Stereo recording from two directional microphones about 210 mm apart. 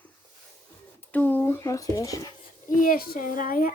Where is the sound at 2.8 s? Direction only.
45° left (ahead or behind).